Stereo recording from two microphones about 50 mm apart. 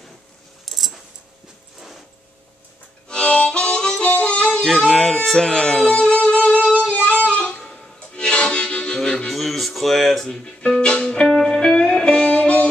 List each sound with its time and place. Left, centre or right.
0.7 s keys jangling: centre
3.1 s harmonica: left
4.6 s music: centre; by 7.2 s left
7.2 s harmonica: centre
9.3 s music: centre
10.4 s music: centre
12.3 s music: left